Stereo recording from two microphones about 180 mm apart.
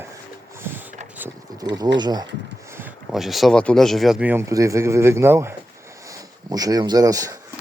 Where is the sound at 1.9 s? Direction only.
25° right (ahead or behind).